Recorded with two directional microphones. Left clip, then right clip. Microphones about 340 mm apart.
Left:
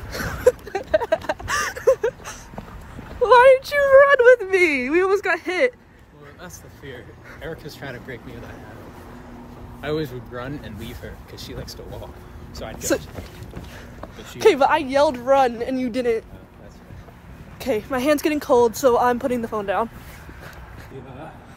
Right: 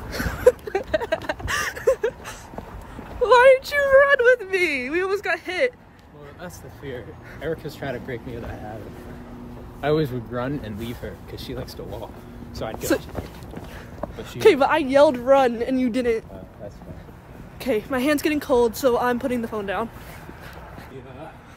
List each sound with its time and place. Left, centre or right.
0.1 s a sound: centre
6.4 s speech: centre
9.8 s speech: right
12.7 s speech: centre
14.4 s speech: centre
17.6 s speech: centre